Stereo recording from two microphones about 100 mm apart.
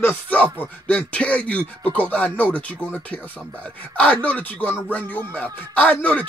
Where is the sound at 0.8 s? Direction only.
10° left (ahead or behind).